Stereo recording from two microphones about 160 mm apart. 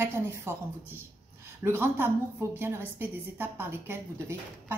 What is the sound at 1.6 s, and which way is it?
A woman's voice, 15° right (ahead or behind).